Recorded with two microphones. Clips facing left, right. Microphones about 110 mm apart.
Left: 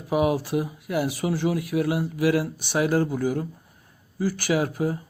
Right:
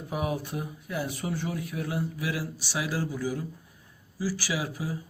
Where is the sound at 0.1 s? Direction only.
90° left.